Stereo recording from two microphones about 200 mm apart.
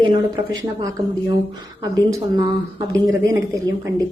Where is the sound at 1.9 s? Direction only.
20° right (ahead or behind).